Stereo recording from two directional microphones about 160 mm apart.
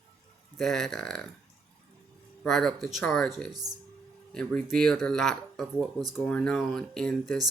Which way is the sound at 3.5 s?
25° right (ahead or behind).